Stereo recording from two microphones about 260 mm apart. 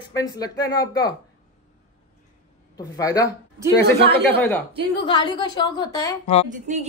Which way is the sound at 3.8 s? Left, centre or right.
Right.